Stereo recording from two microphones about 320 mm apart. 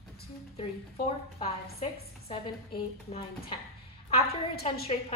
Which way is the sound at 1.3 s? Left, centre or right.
Centre.